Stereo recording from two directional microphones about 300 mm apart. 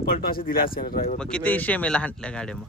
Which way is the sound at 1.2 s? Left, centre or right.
Centre.